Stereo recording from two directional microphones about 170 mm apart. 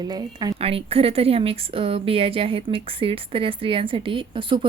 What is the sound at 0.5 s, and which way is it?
Speech, 35° right (ahead or behind).